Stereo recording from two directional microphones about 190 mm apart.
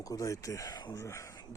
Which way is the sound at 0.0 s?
15° left (ahead or behind).